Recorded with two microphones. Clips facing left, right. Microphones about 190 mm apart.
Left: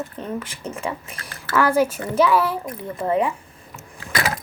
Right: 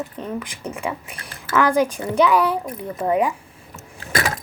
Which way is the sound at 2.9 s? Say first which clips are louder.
Right 1 dB; 10° right (ahead or behind).